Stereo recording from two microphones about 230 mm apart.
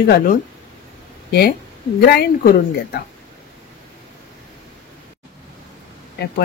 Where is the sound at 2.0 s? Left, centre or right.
Left.